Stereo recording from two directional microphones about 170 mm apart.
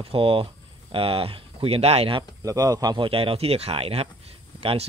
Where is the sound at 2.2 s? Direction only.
20° right (ahead or behind).